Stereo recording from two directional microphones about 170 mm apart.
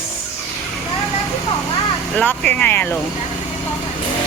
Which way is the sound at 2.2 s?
10° left (ahead or behind).